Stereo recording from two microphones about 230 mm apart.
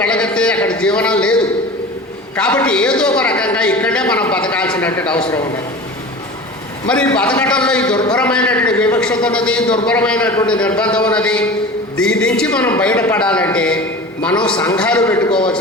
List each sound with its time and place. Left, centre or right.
0.0 s a man's voice: centre
6.8 s a woman's voice: centre
15.3 s a man's voice: left